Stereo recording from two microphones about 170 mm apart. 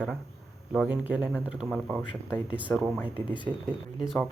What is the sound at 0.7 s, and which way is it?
Speech, 5° right (ahead or behind).